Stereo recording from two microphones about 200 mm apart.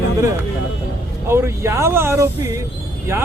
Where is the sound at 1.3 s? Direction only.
10° right (ahead or behind).